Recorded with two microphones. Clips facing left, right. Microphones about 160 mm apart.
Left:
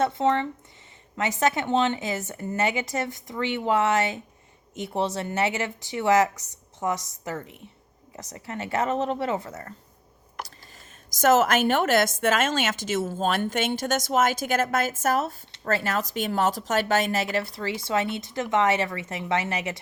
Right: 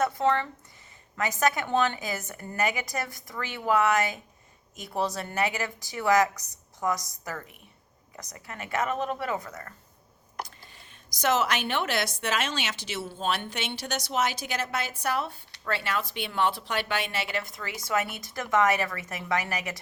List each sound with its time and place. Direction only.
0.0 s a woman's voice: 25° left (ahead or behind)
11.1 s a woman's voice: 45° left (ahead or behind); by 19.8 s 25° left (ahead or behind)